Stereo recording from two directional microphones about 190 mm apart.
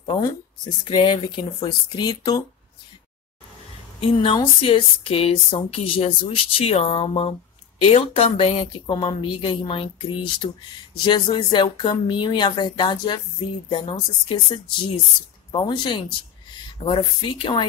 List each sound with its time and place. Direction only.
0.0 s speech: 25° left (ahead or behind)
4.0 s speech: 25° left (ahead or behind)